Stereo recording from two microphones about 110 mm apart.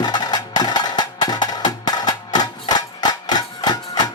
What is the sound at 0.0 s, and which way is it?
Music, 40° left (ahead or behind).